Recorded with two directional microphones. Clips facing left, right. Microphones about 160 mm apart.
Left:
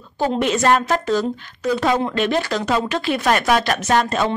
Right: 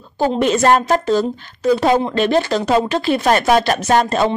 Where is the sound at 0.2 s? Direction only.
35° right (ahead or behind).